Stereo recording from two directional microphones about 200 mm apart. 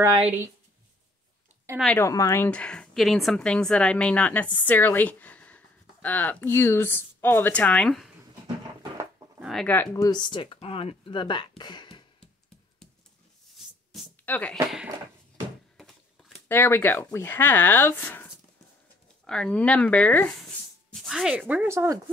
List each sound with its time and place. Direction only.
2.0 s speech: 15° left (ahead or behind)
9.4 s speech: centre (ahead or behind); by 12.3 s 25° left (ahead or behind)
14.2 s speech: 5° left (ahead or behind)
16.4 s speech: 10° left (ahead or behind)
21.0 s speech: centre (ahead or behind)